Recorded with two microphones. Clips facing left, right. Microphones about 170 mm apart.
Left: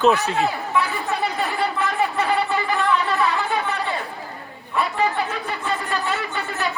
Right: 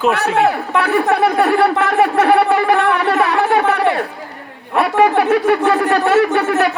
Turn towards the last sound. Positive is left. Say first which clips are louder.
# right 14 dB
turn(degrees=-75)  # may be behind; listen again after turning